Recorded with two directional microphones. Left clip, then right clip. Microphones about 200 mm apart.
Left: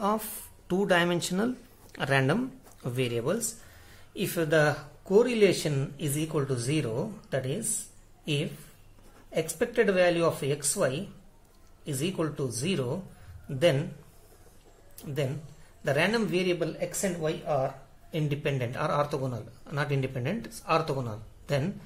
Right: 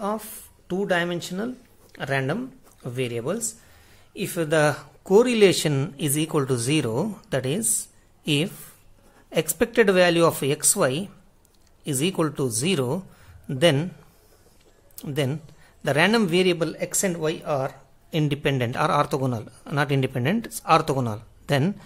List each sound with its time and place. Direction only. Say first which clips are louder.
0.0 s speech: even; 10° right (ahead or behind); by 7.6 s 40° right (ahead or behind)
9.3 s speech: right 6 dB; 40° right (ahead or behind)
15.0 s speech: right 6 dB; 40° right (ahead or behind)